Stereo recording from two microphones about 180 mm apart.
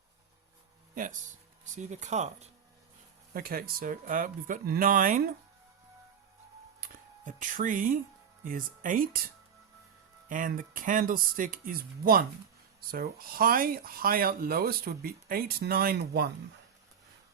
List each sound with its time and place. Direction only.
0.9 s speech: 45° right (ahead or behind)
3.3 s speech: 55° right (ahead or behind)
6.7 s music: 55° right (ahead or behind)
8.4 s speech: 50° right (ahead or behind)
10.2 s speech: 50° right (ahead or behind)